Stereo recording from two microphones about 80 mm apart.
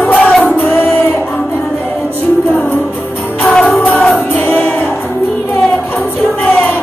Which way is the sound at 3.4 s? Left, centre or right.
Centre.